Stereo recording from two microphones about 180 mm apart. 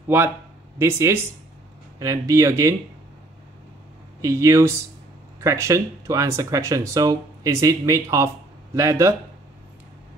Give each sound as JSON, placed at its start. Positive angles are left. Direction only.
{"t": 0.7, "sound": "speech", "side_deg": -15}
{"t": 4.2, "sound": "speech", "side_deg": -15}